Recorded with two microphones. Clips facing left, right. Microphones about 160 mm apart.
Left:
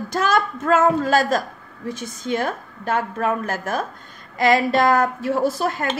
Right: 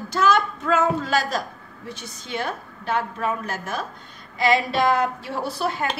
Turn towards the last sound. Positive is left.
turn(degrees=45)  # may be behind; listen again after turning